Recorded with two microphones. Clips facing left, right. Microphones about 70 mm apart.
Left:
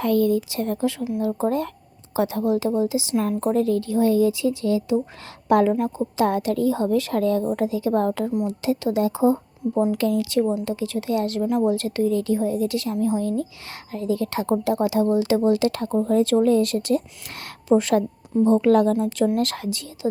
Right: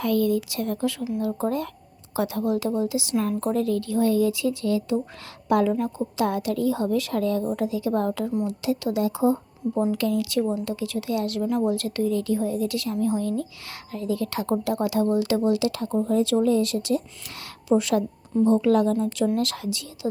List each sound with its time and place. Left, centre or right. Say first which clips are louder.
0.0 s a woman's voice: left 3 dB; left
5.5 s a woman's voice: left 3 dB; left
15.5 s a woman's voice: left 3 dB; left